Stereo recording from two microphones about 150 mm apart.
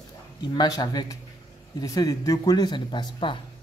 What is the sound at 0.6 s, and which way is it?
Speech, 25° left (ahead or behind).